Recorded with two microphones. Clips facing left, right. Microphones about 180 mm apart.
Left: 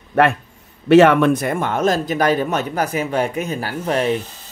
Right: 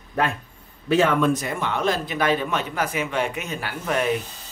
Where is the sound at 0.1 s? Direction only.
75° left (ahead or behind).